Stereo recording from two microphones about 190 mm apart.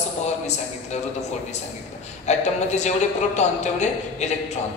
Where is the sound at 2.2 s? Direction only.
35° left (ahead or behind).